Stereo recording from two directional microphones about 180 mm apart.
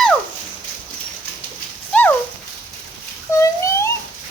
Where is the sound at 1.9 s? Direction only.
10° left (ahead or behind).